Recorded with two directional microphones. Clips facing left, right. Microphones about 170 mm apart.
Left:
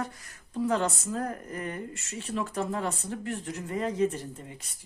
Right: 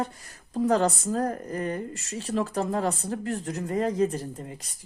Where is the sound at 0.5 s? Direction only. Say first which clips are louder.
Right 5 dB; 40° right (ahead or behind).